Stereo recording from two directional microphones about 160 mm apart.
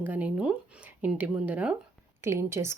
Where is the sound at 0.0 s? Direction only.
10° right (ahead or behind).